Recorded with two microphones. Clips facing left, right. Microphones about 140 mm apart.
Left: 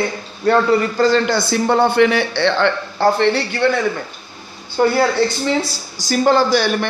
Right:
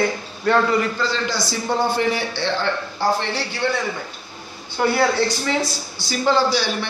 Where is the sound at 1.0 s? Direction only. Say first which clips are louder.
Left 9 dB; 55° left (ahead or behind).